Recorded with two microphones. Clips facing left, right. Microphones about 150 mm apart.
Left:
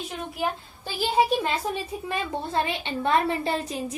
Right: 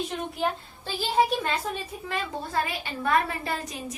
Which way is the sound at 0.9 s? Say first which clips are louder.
Left 2 dB; 10° left (ahead or behind).